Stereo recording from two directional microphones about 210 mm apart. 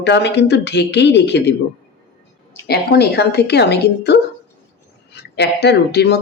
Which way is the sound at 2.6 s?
50° left (ahead or behind).